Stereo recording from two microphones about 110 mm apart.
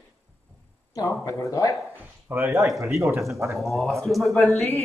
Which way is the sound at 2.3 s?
20° right (ahead or behind).